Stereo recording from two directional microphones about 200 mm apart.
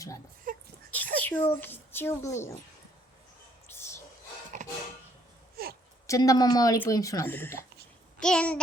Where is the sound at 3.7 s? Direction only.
15° left (ahead or behind).